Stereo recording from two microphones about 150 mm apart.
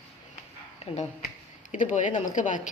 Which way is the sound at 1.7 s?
55° left (ahead or behind).